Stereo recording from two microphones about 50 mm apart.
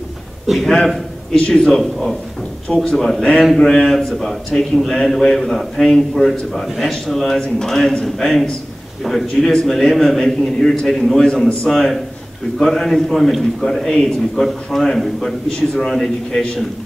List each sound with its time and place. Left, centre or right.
0.5 s a man's voice: centre
2.7 s a man's voice: centre
3.0 s a man's voice: centre